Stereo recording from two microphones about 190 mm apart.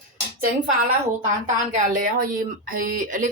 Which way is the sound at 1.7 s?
45° right (ahead or behind).